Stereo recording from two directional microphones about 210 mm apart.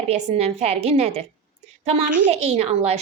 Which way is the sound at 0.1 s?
30° right (ahead or behind).